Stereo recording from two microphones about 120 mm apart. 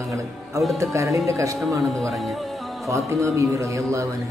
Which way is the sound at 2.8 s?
25° right (ahead or behind).